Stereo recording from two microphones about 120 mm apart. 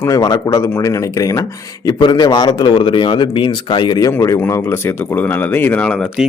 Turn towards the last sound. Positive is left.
turn(degrees=10)  # may be behind; listen again after turning